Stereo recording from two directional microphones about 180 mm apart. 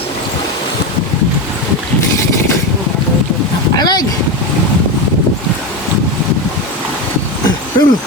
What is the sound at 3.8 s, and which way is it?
Speech, 25° left (ahead or behind).